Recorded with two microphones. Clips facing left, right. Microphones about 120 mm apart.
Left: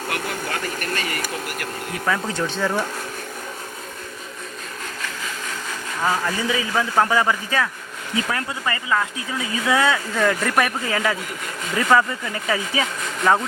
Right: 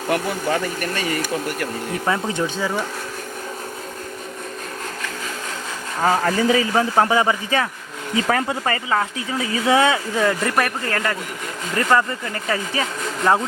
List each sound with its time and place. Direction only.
2.0 s speech: 20° right (ahead or behind)
2.4 s speech: 5° right (ahead or behind)
6.0 s a man's voice: 40° right (ahead or behind)
6.9 s speech: 20° right (ahead or behind)
8.3 s speech: 65° right (ahead or behind)
8.6 s speech: 35° right (ahead or behind)
10.2 s speech: 5° right (ahead or behind)